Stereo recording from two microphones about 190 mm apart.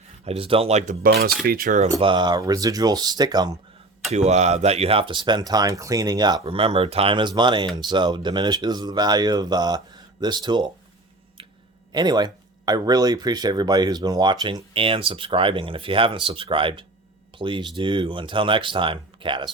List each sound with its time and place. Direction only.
0.3 s speech: 30° right (ahead or behind)
1.0 s cutlery: 50° right (ahead or behind)
2.0 s speech: 25° right (ahead or behind)
4.1 s speech: 35° right (ahead or behind)
11.4 s a sound: 30° right (ahead or behind)
11.9 s speech: 20° right (ahead or behind)